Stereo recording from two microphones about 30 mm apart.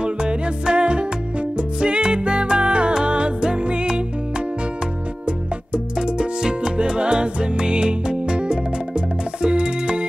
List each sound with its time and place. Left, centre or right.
0.0 s music: right
5.9 s music: right